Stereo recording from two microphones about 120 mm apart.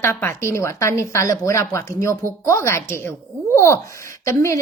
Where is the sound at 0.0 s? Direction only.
20° left (ahead or behind).